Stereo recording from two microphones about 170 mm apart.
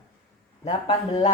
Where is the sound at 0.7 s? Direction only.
25° left (ahead or behind).